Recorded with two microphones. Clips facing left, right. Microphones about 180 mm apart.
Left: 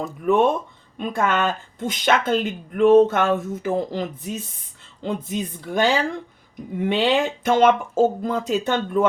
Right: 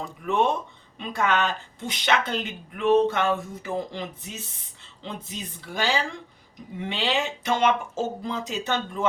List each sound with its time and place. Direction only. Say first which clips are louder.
0.3 s speech: left 6 dB; 50° left (ahead or behind)